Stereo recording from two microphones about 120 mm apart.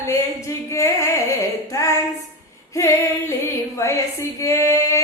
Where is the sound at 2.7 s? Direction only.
25° left (ahead or behind).